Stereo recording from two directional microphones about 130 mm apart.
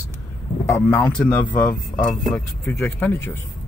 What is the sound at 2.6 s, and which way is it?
Speech, 15° left (ahead or behind).